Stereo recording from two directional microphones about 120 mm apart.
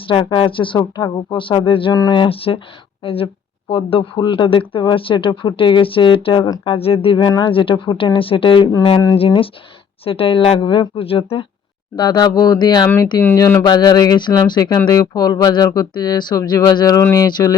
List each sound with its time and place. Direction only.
0.1 s speech: 45° left (ahead or behind)
7.2 s speech: 35° left (ahead or behind)
7.5 s speech: 45° left (ahead or behind)
11.9 s speech: 35° left (ahead or behind)
17.2 s speech: 35° left (ahead or behind)